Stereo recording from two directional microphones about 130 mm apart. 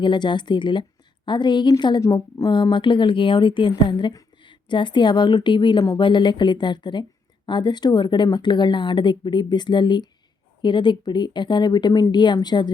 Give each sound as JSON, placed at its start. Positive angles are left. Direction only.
{"t": 0.0, "sound": "a woman's voice", "side_deg": 35}